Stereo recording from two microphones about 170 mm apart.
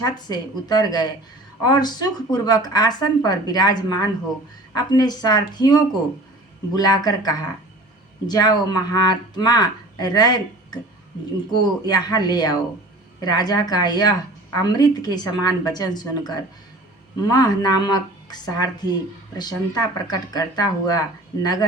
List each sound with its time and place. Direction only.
0.0 s a woman's voice: 25° left (ahead or behind)